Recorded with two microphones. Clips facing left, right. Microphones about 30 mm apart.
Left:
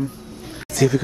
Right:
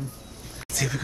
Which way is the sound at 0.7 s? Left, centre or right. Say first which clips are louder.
Left 11 dB; centre.